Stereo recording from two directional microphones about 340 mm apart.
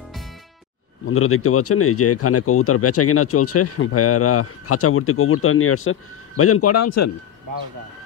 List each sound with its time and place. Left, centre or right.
1.0 s speech: left